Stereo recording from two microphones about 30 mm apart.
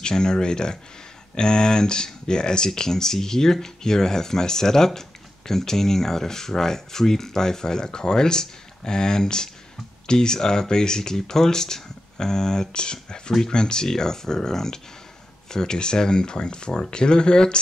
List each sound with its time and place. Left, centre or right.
0.0 s speech: left